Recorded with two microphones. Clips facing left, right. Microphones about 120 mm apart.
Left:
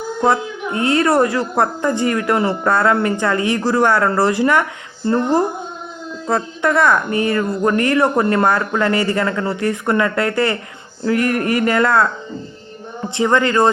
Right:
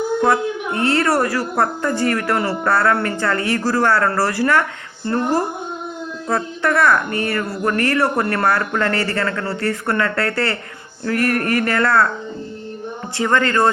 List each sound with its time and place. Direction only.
0.3 s a woman's voice: 20° left (ahead or behind)
13.1 s a woman's voice: 20° left (ahead or behind)